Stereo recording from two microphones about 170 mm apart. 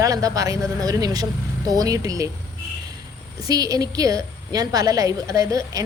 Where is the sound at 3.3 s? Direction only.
20° right (ahead or behind).